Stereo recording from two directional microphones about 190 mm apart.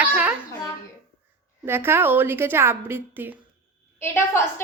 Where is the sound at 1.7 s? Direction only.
10° right (ahead or behind).